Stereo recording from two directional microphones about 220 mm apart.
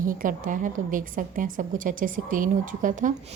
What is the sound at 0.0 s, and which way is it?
A woman's voice, 35° right (ahead or behind).